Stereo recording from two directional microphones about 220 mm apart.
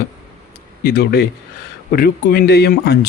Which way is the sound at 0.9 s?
45° left (ahead or behind).